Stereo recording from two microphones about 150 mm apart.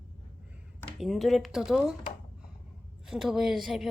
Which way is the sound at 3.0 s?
5° right (ahead or behind).